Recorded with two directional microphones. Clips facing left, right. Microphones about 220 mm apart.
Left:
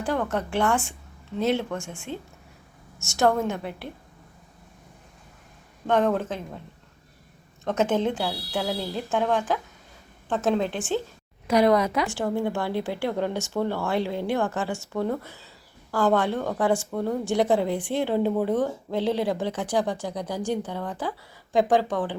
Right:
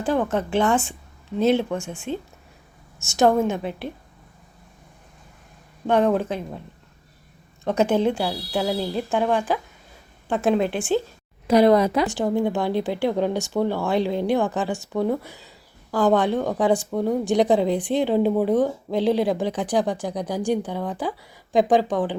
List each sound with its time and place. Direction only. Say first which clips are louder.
0.0 s speech: right 4 dB; 15° right (ahead or behind)
5.9 s speech: right 3 dB; 15° right (ahead or behind)
7.6 s speech: right 4 dB; 10° right (ahead or behind)
11.4 s speech: right 4 dB; 30° right (ahead or behind)
12.0 s speech: right 4 dB; 15° right (ahead or behind)